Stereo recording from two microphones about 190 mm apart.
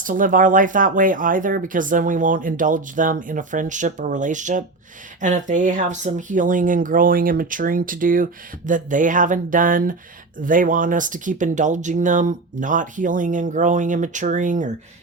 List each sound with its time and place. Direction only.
0.0 s speech: 45° right (ahead or behind)